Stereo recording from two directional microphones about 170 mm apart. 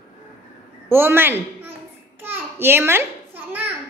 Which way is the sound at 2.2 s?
10° right (ahead or behind).